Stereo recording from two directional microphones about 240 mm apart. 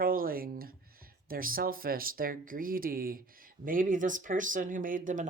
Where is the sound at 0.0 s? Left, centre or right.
Right.